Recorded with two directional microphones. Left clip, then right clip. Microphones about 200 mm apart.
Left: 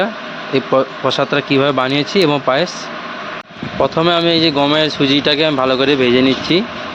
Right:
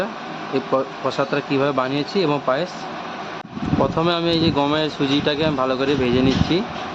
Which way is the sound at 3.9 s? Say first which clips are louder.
Left 6 dB; 10° left (ahead or behind).